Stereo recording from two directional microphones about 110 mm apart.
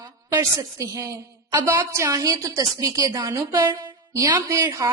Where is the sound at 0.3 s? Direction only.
30° right (ahead or behind).